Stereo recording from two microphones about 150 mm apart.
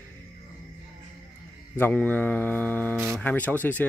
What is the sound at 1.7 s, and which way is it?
Speech, 15° left (ahead or behind).